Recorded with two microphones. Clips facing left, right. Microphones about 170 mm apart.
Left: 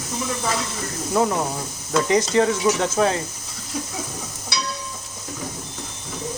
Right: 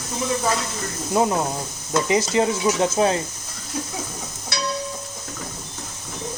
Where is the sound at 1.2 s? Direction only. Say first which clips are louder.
Even; 20° right (ahead or behind).